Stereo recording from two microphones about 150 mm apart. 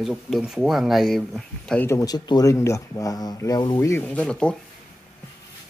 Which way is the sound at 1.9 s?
25° left (ahead or behind).